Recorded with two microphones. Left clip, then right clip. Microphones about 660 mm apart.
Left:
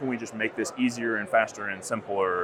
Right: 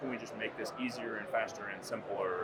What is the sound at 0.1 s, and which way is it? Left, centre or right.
A man's voice, left.